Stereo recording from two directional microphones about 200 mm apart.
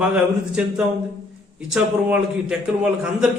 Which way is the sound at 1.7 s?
5° right (ahead or behind).